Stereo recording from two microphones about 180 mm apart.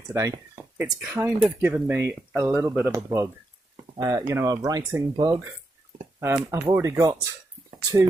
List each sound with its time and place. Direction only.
0.1 s speech: 15° right (ahead or behind)